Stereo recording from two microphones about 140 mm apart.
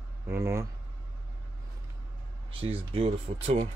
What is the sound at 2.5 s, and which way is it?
Speech, 40° right (ahead or behind).